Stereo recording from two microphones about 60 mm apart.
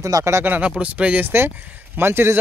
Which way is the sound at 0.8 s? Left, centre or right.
Right.